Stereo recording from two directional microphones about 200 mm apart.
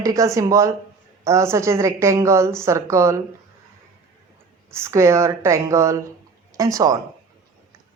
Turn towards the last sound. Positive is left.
turn(degrees=-15)  # may be behind; listen again after turning